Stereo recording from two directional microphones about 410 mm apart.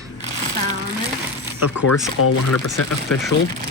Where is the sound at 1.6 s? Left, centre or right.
Left.